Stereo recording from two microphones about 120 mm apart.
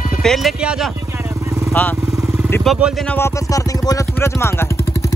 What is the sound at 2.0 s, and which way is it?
Vehicle, 25° right (ahead or behind).